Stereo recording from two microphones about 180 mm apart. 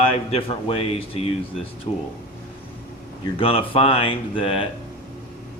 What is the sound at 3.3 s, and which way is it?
Speech, 30° left (ahead or behind).